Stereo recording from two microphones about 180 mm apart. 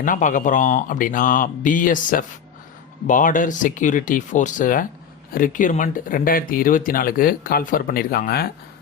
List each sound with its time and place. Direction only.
0.0 s speech: 45° left (ahead or behind)